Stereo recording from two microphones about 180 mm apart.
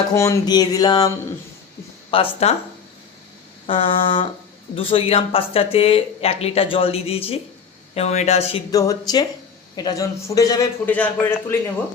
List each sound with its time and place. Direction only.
0.1 s a man's voice: 15° left (ahead or behind); by 2.6 s 35° left (ahead or behind)
3.7 s a man's voice: 30° left (ahead or behind)
8.7 s a man's voice: 20° left (ahead or behind)
10.9 s a man's voice: 10° left (ahead or behind)